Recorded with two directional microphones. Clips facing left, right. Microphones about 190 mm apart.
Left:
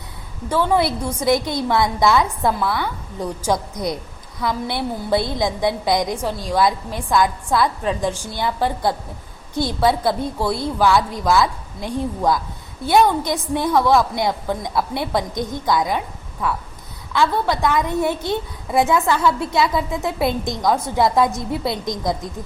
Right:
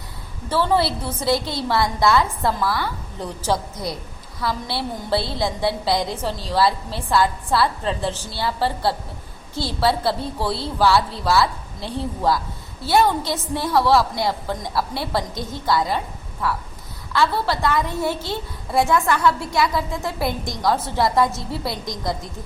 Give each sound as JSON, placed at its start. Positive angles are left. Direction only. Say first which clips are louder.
{"t": 0.6, "sound": "a woman's voice", "louder": "left 1 dB", "side_deg": 15}
{"t": 2.5, "sound": "a woman's voice", "louder": "left 1 dB", "side_deg": 0}
{"t": 2.8, "sound": "a woman's voice", "louder": "left 3 dB", "side_deg": 15}
{"t": 17.2, "sound": "a woman's voice", "louder": "left 2 dB", "side_deg": 20}